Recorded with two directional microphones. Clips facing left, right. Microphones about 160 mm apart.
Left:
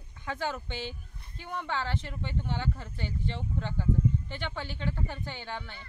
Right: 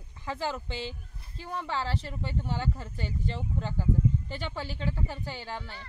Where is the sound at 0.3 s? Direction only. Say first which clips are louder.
Right 1 dB; 30° right (ahead or behind).